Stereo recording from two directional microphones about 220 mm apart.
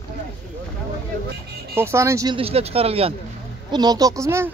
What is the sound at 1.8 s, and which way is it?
Speech, 10° right (ahead or behind).